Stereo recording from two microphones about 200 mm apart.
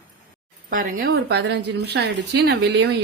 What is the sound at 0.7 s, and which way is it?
A woman's voice, 45° right (ahead or behind).